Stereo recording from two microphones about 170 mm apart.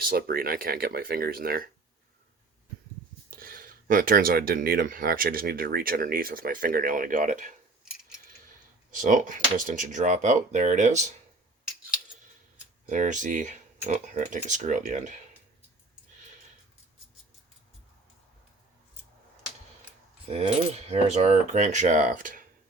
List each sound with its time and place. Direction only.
0.0 s speech: 60° right (ahead or behind)
3.2 s speech: 55° right (ahead or behind)
8.9 s speech: 50° right (ahead or behind)
12.9 s speech: 45° right (ahead or behind)
20.3 s speech: 40° right (ahead or behind)